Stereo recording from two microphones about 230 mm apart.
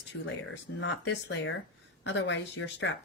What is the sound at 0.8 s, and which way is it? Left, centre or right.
Speech, left.